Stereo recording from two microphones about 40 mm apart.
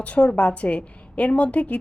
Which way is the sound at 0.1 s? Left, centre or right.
Left.